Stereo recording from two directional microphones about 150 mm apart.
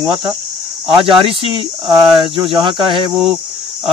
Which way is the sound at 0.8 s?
35° right (ahead or behind).